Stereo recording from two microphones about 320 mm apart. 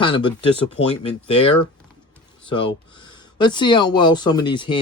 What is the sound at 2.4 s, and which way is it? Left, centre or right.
Speech, centre.